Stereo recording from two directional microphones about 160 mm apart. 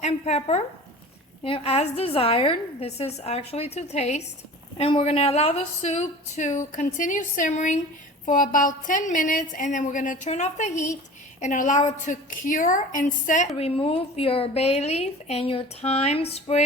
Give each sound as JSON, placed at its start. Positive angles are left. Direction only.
{"t": 0.0, "sound": "a woman's voice", "side_deg": 45}
{"t": 13.6, "sound": "a woman's voice", "side_deg": 35}